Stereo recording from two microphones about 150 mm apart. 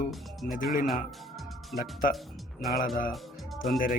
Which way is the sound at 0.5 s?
65° left (ahead or behind).